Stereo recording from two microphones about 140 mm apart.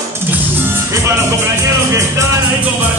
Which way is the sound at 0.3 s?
15° right (ahead or behind).